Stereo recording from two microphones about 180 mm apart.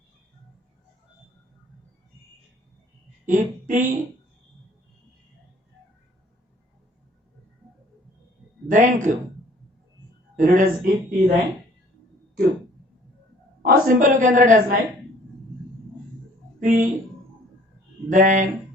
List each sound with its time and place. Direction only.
3.2 s a woman's voice: 45° right (ahead or behind)
8.7 s a woman's voice: 45° right (ahead or behind)
10.3 s a woman's voice: 50° right (ahead or behind)
13.7 s a woman's voice: 50° right (ahead or behind)
16.6 s speech: 45° right (ahead or behind)
18.1 s a woman's voice: 45° right (ahead or behind)